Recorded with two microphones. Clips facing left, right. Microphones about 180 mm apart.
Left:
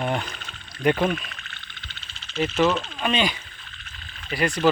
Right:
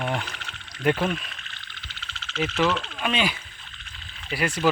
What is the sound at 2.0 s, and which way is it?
Frog, 90° right.